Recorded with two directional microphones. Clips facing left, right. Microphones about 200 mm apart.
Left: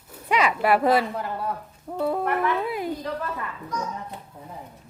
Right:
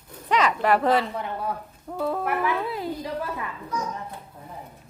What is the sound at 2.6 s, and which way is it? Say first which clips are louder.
Speech: left 2 dB; 15° left (ahead or behind).